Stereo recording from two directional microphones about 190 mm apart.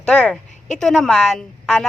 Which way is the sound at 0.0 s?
5° left (ahead or behind).